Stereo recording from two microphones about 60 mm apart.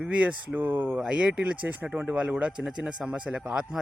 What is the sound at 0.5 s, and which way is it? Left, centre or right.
Speech, right.